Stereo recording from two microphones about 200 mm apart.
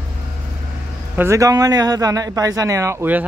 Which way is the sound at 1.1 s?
15° right (ahead or behind).